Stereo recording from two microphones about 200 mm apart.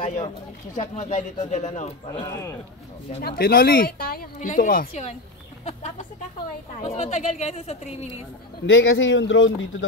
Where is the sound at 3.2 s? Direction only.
50° left (ahead or behind); by 8.1 s 35° left (ahead or behind).